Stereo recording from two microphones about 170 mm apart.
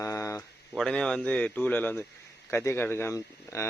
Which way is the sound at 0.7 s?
5° left (ahead or behind).